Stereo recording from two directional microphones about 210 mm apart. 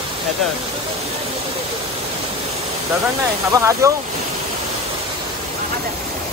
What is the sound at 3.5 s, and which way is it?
Speech, 15° right (ahead or behind).